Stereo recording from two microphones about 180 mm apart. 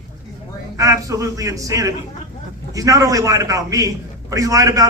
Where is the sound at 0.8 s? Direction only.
20° right (ahead or behind).